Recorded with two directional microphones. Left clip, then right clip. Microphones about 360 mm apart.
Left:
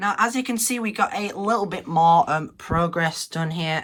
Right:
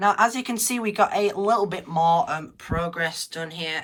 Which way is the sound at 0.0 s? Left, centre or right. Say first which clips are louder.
Right 2 dB; centre.